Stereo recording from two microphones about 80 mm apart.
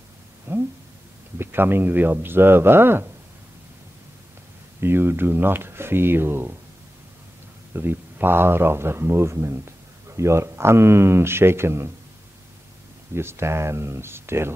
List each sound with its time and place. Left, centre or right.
0.5 s a sound: right
1.4 s speech: right
4.7 s speech: right
7.7 s speech: right
13.1 s speech: right